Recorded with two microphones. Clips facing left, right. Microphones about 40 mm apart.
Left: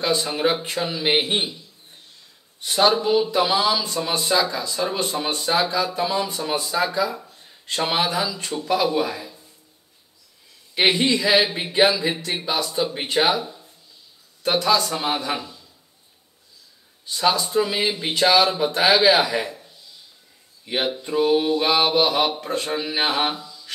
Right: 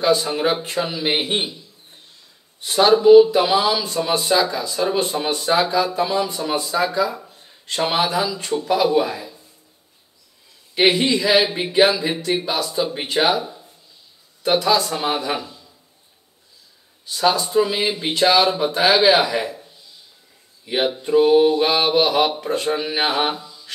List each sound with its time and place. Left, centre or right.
0.2 s speech: centre
2.6 s speech: centre
10.7 s speech: centre
17.0 s speech: centre
20.7 s mantra: centre
23.3 s mantra: centre